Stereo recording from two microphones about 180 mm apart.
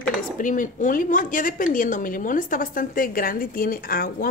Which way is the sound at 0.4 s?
45° left (ahead or behind).